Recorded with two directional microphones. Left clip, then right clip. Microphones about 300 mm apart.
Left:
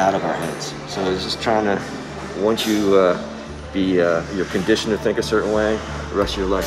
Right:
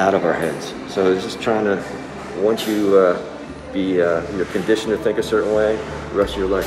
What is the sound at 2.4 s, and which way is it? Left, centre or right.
Speech, left.